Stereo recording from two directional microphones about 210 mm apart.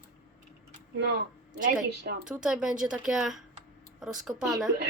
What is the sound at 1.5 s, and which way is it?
Speech, 45° right (ahead or behind).